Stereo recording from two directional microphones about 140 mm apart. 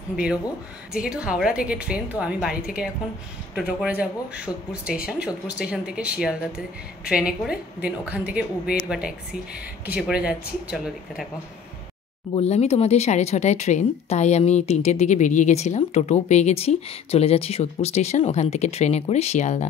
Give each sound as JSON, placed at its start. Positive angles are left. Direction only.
{"t": 0.1, "sound": "a woman's voice", "side_deg": -5}
{"t": 12.4, "sound": "speech", "side_deg": 50}